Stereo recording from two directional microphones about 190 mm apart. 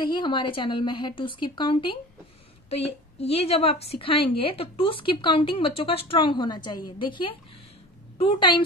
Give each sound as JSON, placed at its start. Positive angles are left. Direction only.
{"t": 0.0, "sound": "speech", "side_deg": 25}
{"t": 3.2, "sound": "speech", "side_deg": 30}